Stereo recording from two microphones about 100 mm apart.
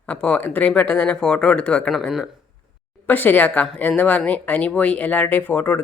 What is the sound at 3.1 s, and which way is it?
Speech, 20° left (ahead or behind).